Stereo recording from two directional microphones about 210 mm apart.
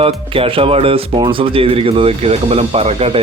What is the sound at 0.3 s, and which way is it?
Speech, 25° right (ahead or behind).